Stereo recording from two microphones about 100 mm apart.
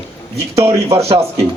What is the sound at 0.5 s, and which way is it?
Speech, 30° right (ahead or behind).